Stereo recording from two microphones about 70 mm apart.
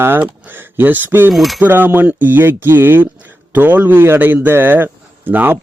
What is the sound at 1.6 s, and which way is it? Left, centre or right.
A man's voice, right.